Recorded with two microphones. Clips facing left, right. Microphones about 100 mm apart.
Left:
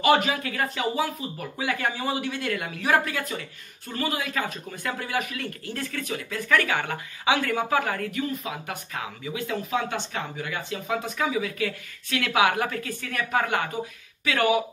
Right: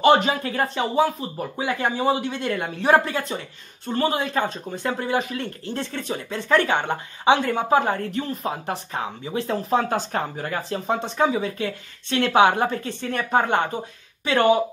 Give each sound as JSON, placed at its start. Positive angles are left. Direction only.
{"t": 0.0, "sound": "speech", "side_deg": -25}